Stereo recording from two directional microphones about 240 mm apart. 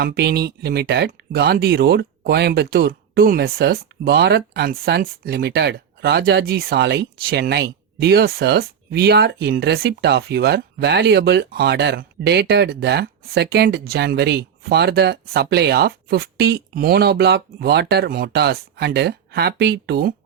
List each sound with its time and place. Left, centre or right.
0.0 s speech: right